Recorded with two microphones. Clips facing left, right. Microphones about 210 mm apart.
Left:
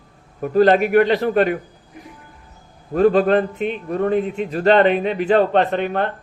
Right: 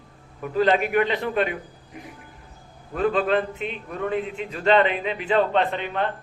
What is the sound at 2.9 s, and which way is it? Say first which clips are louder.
Speech: left 7 dB; 45° left (ahead or behind).